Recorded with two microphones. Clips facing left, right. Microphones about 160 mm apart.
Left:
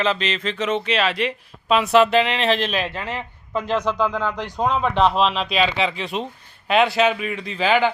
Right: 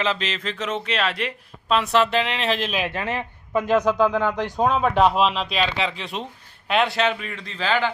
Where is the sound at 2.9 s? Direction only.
20° right (ahead or behind).